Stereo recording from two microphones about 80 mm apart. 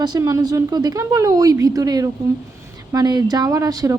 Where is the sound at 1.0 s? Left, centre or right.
Right.